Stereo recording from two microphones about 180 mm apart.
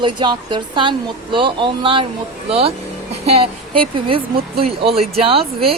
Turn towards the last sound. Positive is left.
turn(degrees=-30)  # may be behind; listen again after turning